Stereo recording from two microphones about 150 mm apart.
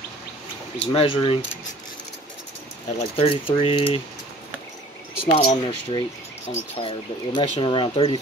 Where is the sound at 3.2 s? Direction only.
35° left (ahead or behind).